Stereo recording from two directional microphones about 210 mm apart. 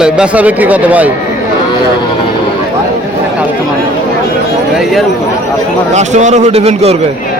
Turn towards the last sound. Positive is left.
turn(degrees=-30)  # may be behind; listen again after turning